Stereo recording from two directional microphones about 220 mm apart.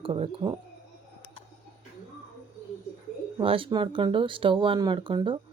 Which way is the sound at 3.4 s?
25° right (ahead or behind).